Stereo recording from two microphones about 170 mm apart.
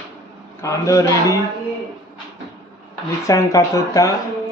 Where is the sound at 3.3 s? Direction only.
20° left (ahead or behind).